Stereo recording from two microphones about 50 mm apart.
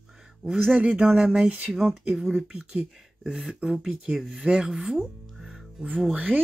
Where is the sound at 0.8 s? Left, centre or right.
Centre.